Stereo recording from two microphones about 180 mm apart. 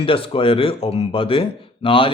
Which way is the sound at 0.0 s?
30° left (ahead or behind).